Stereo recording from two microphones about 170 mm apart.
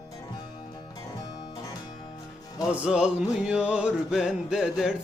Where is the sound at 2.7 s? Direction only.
5° right (ahead or behind).